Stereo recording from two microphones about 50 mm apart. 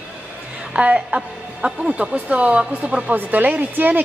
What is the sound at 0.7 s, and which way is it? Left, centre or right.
A woman's voice, right.